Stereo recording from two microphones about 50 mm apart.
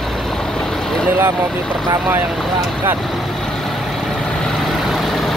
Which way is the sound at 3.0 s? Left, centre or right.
Centre.